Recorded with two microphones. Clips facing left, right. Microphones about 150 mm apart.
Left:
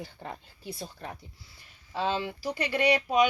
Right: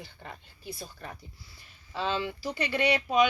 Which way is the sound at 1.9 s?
10° left (ahead or behind).